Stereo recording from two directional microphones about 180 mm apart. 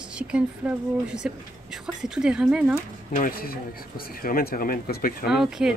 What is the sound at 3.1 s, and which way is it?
Speech, 50° left (ahead or behind).